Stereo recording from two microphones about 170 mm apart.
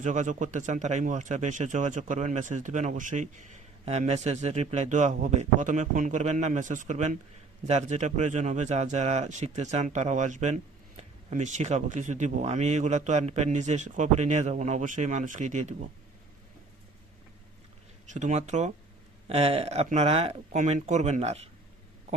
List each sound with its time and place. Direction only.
0.0 s speech: 45° right (ahead or behind)
18.1 s speech: 45° right (ahead or behind)